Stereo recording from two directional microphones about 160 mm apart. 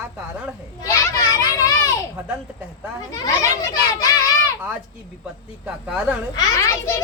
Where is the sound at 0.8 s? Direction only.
20° left (ahead or behind).